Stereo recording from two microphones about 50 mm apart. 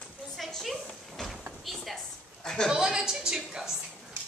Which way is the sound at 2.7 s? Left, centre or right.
Centre.